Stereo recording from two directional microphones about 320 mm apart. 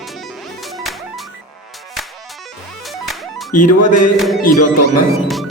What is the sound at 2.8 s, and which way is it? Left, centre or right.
Music, centre.